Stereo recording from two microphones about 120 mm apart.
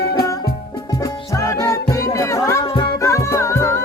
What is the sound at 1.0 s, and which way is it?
Music, 25° left (ahead or behind).